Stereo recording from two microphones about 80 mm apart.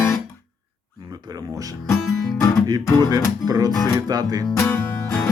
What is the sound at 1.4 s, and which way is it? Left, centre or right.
Music, right.